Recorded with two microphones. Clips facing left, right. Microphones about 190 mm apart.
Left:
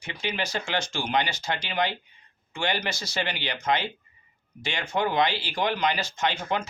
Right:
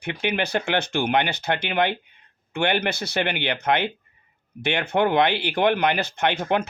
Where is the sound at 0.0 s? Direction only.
60° right (ahead or behind).